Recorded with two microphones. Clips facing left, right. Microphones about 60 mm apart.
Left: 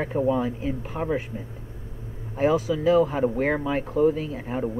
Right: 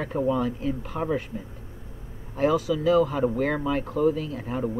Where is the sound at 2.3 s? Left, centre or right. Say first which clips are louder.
Left 1 dB; left.